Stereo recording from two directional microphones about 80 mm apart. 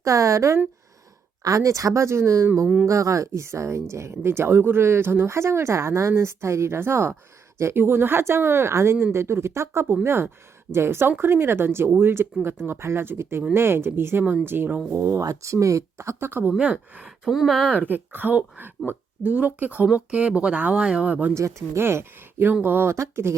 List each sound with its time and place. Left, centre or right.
0.0 s speech: right
14.9 s speech: right
16.6 s speech: centre
17.1 s speech: centre
17.7 s speech: right
21.3 s speech: right